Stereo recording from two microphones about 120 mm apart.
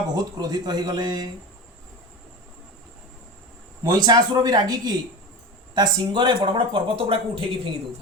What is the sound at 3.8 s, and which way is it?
Speech, 35° right (ahead or behind).